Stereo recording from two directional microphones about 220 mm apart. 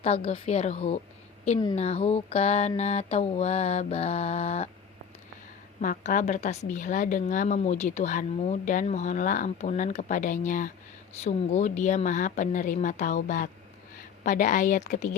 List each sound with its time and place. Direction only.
0.0 s mantra: 25° left (ahead or behind)
5.8 s a woman's voice: 35° left (ahead or behind)